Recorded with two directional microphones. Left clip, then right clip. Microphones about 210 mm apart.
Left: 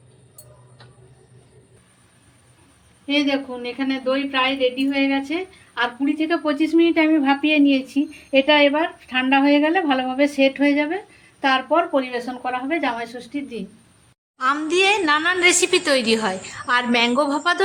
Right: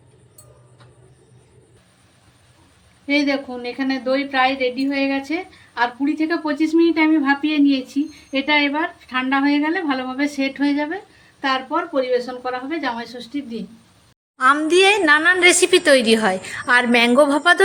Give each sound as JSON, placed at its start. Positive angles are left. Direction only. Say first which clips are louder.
{"t": 3.2, "sound": "a woman's voice", "louder": "right 1 dB", "side_deg": -35}
{"t": 14.3, "sound": "a woman's voice", "louder": "right 5 dB", "side_deg": -20}